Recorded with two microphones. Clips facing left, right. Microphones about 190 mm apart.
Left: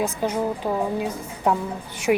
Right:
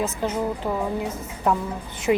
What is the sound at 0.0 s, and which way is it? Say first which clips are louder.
Speech: left 1 dB; 15° left (ahead or behind).